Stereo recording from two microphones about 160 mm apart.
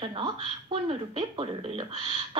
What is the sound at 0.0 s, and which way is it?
A woman's voice, 30° right (ahead or behind).